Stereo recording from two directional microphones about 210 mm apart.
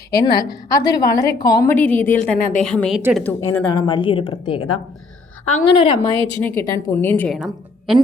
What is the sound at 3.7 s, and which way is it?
Speech, 20° left (ahead or behind).